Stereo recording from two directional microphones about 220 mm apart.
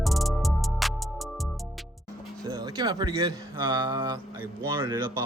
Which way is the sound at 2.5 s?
20° right (ahead or behind).